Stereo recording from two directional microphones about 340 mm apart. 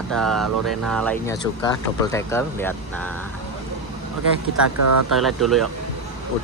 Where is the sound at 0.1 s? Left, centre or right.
Centre.